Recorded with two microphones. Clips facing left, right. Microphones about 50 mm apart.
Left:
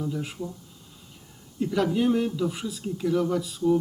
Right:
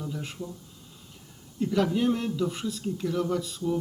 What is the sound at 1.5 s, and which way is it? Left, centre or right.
Speech, centre.